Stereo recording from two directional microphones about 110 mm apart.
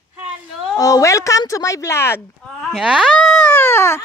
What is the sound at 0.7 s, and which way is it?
A woman's voice, 30° left (ahead or behind).